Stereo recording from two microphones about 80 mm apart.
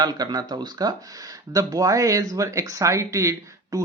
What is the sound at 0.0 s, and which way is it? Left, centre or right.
Speech, right.